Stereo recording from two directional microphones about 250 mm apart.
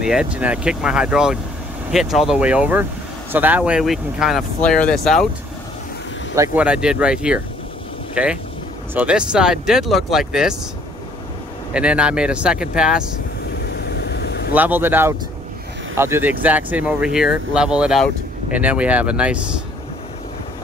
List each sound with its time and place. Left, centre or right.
0.0 s speech: centre
6.3 s speech: centre
11.7 s speech: centre
13.7 s vehicle: left
14.5 s speech: centre